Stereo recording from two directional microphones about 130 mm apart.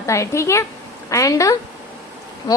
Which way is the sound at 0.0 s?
25° left (ahead or behind).